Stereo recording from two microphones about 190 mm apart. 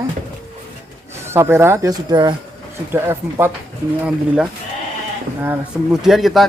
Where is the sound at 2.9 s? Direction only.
10° right (ahead or behind).